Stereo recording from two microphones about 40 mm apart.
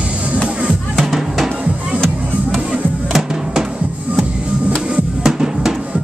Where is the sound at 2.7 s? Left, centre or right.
Centre.